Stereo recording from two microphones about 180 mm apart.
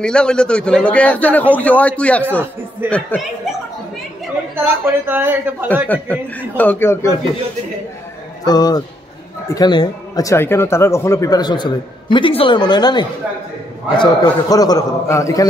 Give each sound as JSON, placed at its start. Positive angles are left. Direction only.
{"t": 0.0, "sound": "a man's voice", "side_deg": 5}
{"t": 4.6, "sound": "a man's voice", "side_deg": -10}
{"t": 5.9, "sound": "a man's voice", "side_deg": 10}
{"t": 8.5, "sound": "speech", "side_deg": 20}